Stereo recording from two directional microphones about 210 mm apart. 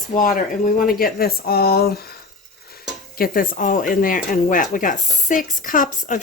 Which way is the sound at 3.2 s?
40° left (ahead or behind).